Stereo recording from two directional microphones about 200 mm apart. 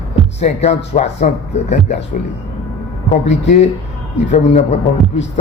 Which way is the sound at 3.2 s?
35° left (ahead or behind).